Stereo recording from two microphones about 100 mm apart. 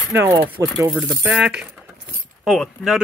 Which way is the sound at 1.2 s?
10° right (ahead or behind).